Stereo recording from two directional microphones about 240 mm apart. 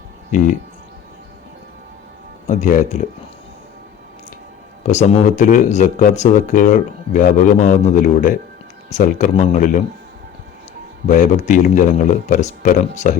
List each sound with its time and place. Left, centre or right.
0.3 s speech: left
2.5 s speech: left
4.9 s speech: left
11.1 s speech: left